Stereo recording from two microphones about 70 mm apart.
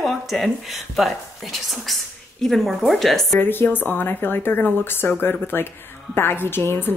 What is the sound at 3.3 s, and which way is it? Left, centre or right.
A woman's voice, left.